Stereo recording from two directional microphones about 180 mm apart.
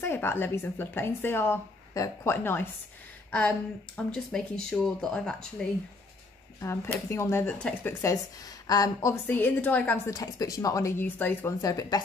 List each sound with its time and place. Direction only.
0.0 s speech: 15° left (ahead or behind)
6.6 s speech: 15° left (ahead or behind)
8.6 s speech: 20° left (ahead or behind)
10.1 s speech: 20° left (ahead or behind)